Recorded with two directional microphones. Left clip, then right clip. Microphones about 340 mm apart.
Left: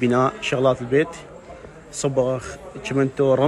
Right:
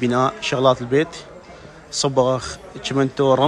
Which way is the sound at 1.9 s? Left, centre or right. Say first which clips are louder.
Right 3 dB; centre.